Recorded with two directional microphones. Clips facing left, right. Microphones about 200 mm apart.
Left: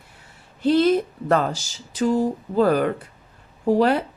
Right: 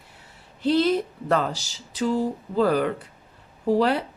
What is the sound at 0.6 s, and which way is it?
Speech, 50° left (ahead or behind).